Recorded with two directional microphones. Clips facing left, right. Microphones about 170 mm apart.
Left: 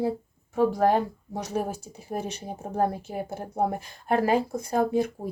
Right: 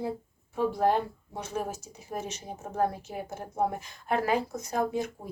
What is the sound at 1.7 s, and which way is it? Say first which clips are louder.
A woman's voice: left 4 dB; 30° left (ahead or behind).